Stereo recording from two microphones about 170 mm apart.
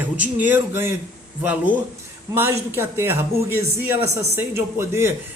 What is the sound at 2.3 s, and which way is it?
Speech, 15° right (ahead or behind).